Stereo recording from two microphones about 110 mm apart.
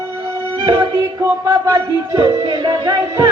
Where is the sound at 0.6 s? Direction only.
30° right (ahead or behind).